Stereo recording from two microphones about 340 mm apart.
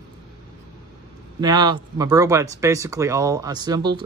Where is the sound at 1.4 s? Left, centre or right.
Centre.